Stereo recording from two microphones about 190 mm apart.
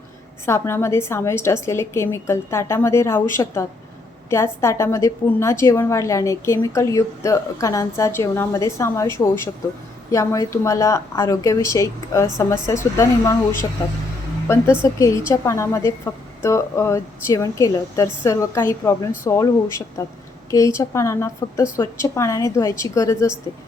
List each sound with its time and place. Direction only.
0.4 s a woman's voice: 15° left (ahead or behind)
14.8 s a woman's voice: 15° left (ahead or behind)